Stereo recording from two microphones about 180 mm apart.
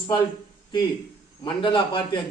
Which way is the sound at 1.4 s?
25° left (ahead or behind).